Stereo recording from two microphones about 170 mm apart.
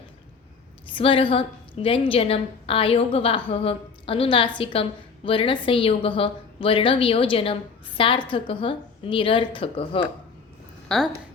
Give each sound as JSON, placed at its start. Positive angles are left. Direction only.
{"t": 0.9, "sound": "a woman's voice", "side_deg": 30}
{"t": 10.8, "sound": "speech", "side_deg": 0}